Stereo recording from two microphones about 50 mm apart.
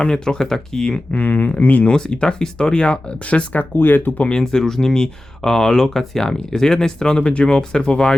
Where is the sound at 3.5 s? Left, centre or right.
Left.